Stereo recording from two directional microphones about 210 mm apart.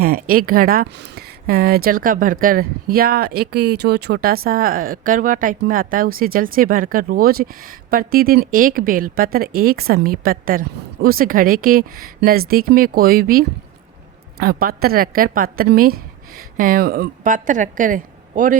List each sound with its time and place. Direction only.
0.0 s a woman's voice: 45° right (ahead or behind)